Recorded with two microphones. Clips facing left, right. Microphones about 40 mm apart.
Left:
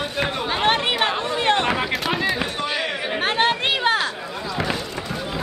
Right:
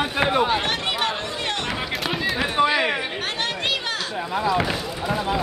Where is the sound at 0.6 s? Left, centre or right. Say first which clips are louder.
Left 4 dB; left.